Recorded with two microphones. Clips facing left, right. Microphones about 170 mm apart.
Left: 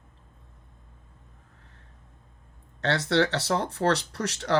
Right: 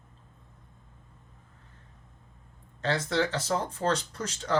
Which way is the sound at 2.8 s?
70° left (ahead or behind).